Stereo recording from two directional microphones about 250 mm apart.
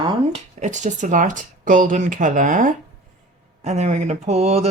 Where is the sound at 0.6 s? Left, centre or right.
Right.